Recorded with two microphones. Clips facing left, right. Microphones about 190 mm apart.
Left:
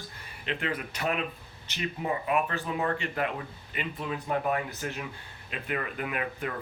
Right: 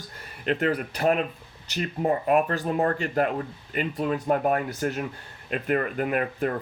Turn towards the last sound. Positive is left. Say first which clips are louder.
# right 7 dB
turn(degrees=-45)  # may be behind; listen again after turning